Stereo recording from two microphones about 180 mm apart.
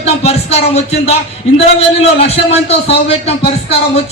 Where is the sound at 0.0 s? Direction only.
35° left (ahead or behind).